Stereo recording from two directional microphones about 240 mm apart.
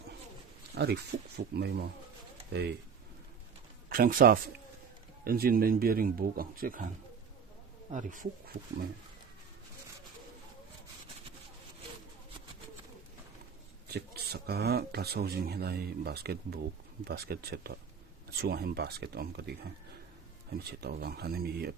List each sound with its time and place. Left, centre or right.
0.7 s a sound: right
1.4 s speech: right
3.8 s a man's voice: right
7.9 s speech: right
13.8 s speech: right